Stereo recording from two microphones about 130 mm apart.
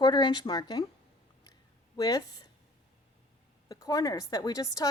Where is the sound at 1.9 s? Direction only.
30° left (ahead or behind).